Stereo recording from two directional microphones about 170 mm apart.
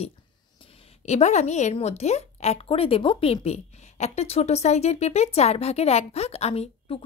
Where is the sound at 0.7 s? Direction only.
35° left (ahead or behind).